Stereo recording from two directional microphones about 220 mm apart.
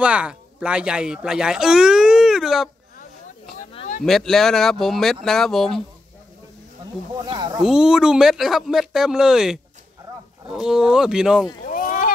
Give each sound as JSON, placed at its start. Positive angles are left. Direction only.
{"t": 0.0, "sound": "speech", "side_deg": -5}
{"t": 4.0, "sound": "speech", "side_deg": 0}
{"t": 7.2, "sound": "speech", "side_deg": -20}
{"t": 7.6, "sound": "speech", "side_deg": -5}
{"t": 11.6, "sound": "a sound", "side_deg": 40}